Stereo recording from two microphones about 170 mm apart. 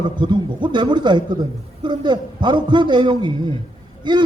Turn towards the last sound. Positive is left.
turn(degrees=-25)  # may be behind; listen again after turning